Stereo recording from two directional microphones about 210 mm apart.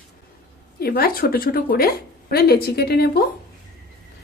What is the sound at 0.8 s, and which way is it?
A woman's voice, 45° left (ahead or behind).